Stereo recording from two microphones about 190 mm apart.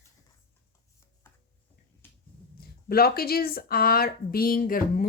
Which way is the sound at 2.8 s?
55° left (ahead or behind).